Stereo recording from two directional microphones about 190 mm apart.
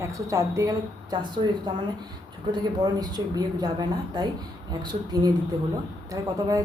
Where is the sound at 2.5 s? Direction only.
20° right (ahead or behind).